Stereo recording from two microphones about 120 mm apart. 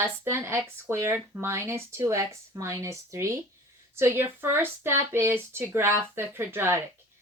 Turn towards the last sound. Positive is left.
turn(degrees=-20)  # may be behind; listen again after turning